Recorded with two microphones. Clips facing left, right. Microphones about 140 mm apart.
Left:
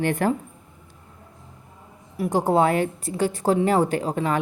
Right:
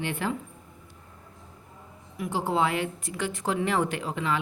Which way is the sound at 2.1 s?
40° left (ahead or behind).